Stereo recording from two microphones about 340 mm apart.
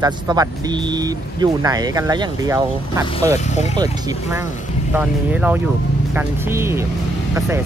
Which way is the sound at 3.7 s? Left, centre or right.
Centre.